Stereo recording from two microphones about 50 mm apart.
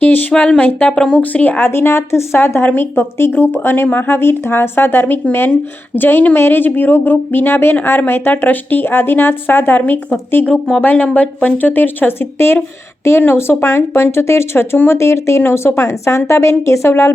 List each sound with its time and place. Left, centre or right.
0.0 s speech: left
0.3 s speech: centre
1.2 s speech: left
1.5 s speech: left
2.7 s speech: left
10.4 s speech: centre
11.0 s speech: left
16.9 s speech: left